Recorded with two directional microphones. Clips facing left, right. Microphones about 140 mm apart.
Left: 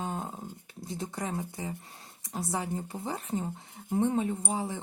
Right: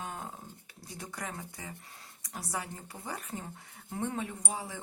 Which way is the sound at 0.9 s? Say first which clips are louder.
Left 6 dB; 25° left (ahead or behind).